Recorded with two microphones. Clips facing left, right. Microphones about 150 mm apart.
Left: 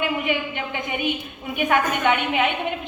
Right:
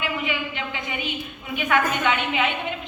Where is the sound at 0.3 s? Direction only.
50° left (ahead or behind).